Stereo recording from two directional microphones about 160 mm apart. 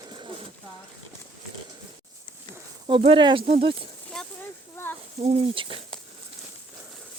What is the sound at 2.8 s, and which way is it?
Speech, 35° right (ahead or behind).